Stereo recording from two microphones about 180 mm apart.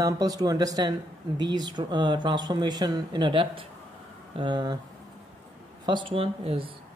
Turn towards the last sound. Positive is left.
turn(degrees=-30)  # may be behind; listen again after turning